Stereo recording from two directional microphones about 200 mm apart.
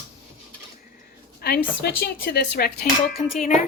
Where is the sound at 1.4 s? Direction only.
55° left (ahead or behind).